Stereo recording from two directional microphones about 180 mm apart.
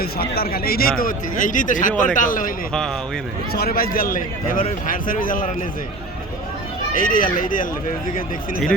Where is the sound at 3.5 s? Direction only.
55° left (ahead or behind).